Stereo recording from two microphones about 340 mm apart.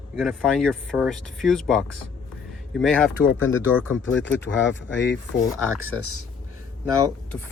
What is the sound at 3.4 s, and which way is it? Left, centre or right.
Speech, left.